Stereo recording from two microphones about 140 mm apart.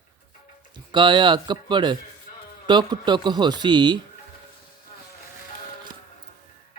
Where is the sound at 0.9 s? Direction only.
35° right (ahead or behind).